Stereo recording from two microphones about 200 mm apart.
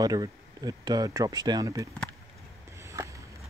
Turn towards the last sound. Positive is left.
turn(degrees=-15)  # may be behind; listen again after turning